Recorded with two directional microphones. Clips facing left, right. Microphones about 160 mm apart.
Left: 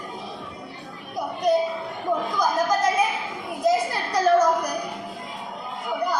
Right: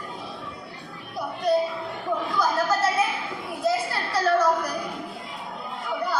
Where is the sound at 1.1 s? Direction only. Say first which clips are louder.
Left 2 dB; 20° left (ahead or behind).